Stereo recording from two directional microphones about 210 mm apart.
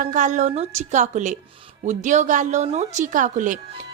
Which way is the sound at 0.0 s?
35° right (ahead or behind).